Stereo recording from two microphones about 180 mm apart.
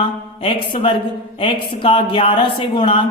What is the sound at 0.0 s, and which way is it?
Speech, 30° left (ahead or behind).